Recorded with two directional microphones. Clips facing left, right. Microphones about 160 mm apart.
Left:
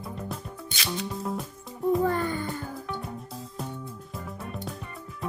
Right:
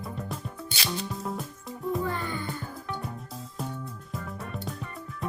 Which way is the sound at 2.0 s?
45° left (ahead or behind).